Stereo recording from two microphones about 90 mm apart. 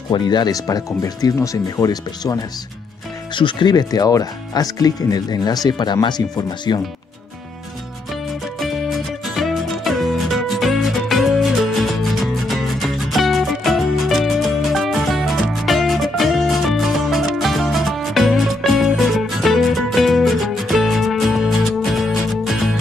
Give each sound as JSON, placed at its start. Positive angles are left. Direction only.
{"t": 0.1, "sound": "speech", "side_deg": 55}
{"t": 0.7, "sound": "speech", "side_deg": 40}
{"t": 3.3, "sound": "speech", "side_deg": 65}
{"t": 8.5, "sound": "music", "side_deg": 0}